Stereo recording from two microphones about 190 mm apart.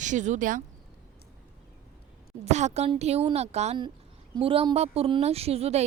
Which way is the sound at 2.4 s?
35° right (ahead or behind).